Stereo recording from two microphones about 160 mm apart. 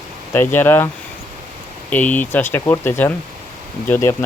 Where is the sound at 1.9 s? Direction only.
10° left (ahead or behind).